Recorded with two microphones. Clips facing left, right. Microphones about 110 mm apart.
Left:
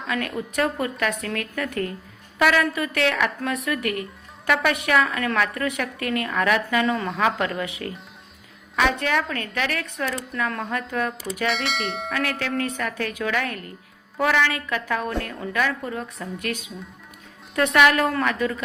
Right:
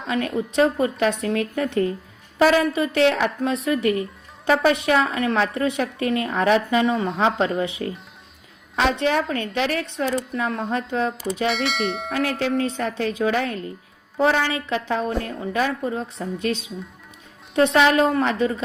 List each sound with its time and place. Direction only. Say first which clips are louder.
0.1 s a woman's voice: right 4 dB; 30° right (ahead or behind)
11.4 s speech: right 2 dB; centre (ahead or behind)
12.1 s a woman's voice: right 4 dB; 25° right (ahead or behind)